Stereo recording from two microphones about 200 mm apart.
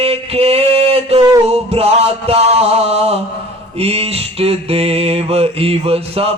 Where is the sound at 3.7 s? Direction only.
30° right (ahead or behind).